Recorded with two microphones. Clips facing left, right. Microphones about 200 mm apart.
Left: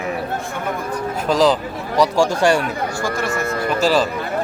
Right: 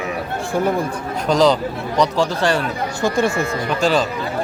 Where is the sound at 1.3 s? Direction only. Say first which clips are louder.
Right 1 dB; centre (ahead or behind).